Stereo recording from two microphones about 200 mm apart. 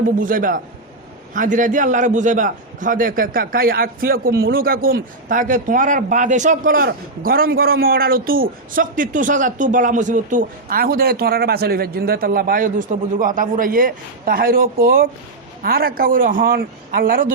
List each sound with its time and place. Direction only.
0.2 s a man's voice: 40° right (ahead or behind)